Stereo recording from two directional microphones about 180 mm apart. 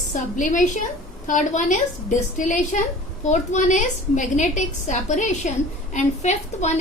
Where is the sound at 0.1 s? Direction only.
45° left (ahead or behind).